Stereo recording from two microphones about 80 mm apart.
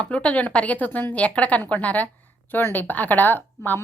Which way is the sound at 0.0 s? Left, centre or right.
Centre.